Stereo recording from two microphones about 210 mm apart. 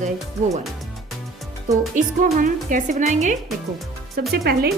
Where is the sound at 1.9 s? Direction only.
40° right (ahead or behind).